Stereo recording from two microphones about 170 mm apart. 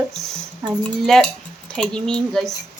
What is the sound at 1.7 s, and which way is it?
Speech, 5° left (ahead or behind).